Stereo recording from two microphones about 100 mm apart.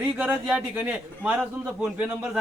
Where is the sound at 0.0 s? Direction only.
20° right (ahead or behind).